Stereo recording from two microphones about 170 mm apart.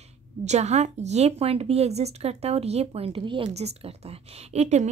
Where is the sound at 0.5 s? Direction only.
40° right (ahead or behind).